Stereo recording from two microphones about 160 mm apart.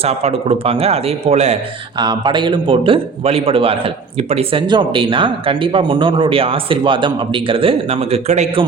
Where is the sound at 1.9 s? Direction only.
25° right (ahead or behind).